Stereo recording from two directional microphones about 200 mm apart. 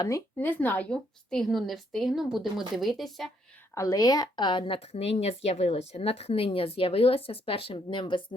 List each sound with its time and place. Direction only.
0.0 s a woman's voice: 10° left (ahead or behind)
3.8 s speech: 15° left (ahead or behind)